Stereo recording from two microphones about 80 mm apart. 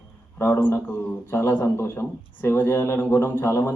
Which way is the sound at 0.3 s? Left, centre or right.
Left.